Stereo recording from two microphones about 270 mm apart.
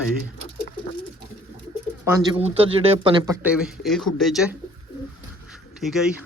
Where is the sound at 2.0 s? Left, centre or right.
Centre.